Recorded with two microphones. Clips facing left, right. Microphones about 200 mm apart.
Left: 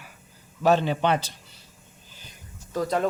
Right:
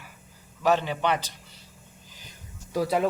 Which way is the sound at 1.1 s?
15° right (ahead or behind).